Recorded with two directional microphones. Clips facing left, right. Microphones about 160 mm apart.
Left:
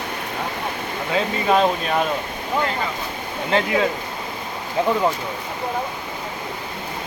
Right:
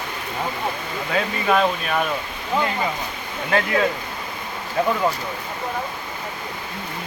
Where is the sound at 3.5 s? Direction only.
20° left (ahead or behind).